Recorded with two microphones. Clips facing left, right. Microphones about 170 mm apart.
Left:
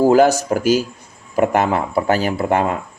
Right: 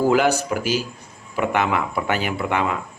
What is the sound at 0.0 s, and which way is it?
Speech, 40° left (ahead or behind).